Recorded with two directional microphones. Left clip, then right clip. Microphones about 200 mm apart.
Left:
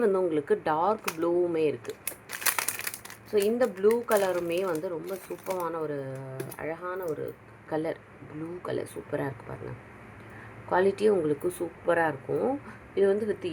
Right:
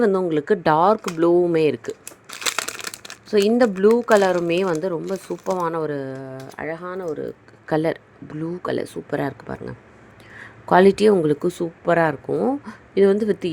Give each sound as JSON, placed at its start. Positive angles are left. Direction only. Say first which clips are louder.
{"t": 0.0, "sound": "speech", "louder": "right 6 dB", "side_deg": -40}
{"t": 2.6, "sound": "crumpling", "louder": "right 5 dB", "side_deg": -15}
{"t": 3.2, "sound": "speech", "louder": "right 8 dB", "side_deg": -50}